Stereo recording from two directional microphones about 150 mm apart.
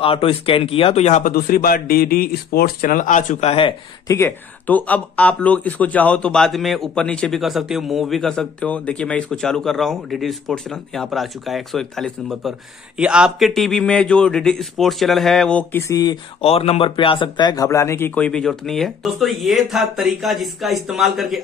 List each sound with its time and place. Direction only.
0.0 s speech: 40° left (ahead or behind)
1.2 s speech: 80° left; by 3.7 s 40° left (ahead or behind)
4.1 s speech: 15° left (ahead or behind)
15.9 s speech: 25° left (ahead or behind)
16.3 s speech: 40° left (ahead or behind); by 21.4 s centre (ahead or behind)